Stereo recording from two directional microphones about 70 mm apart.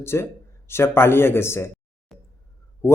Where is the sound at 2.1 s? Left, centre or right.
Centre.